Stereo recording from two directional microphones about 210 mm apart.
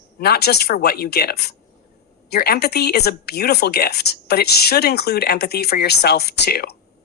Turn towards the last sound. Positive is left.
turn(degrees=50)  # may be behind; listen again after turning